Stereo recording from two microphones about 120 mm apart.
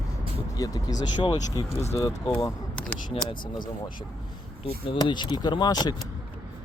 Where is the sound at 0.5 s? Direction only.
30° left (ahead or behind).